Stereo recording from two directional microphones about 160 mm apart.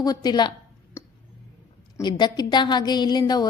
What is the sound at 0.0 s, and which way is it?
Speech, 25° left (ahead or behind).